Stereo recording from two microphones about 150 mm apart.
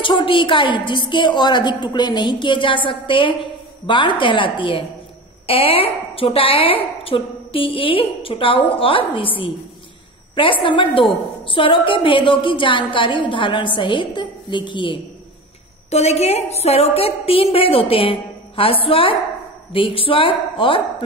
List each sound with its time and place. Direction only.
0.0 s a woman's voice: 35° left (ahead or behind)
15.9 s a woman's voice: 45° left (ahead or behind)